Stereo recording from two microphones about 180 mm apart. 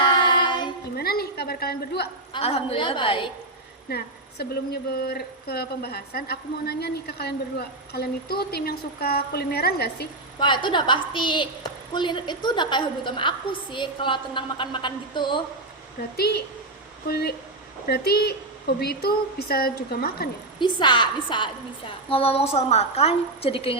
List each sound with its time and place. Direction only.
0.0 s child singing: 25° left (ahead or behind)
0.9 s a sound: 60° left (ahead or behind)
2.3 s a woman's voice: 35° left (ahead or behind)
3.8 s a woman's voice: 60° left (ahead or behind)
10.4 s a woman's voice: 25° left (ahead or behind)
16.1 s a woman's voice: 60° left (ahead or behind)
20.6 s a woman's voice: 25° left (ahead or behind)